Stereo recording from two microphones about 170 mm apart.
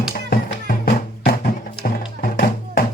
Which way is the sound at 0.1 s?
60° left (ahead or behind).